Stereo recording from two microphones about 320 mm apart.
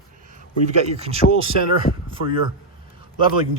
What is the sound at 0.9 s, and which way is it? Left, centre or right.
Speech, centre.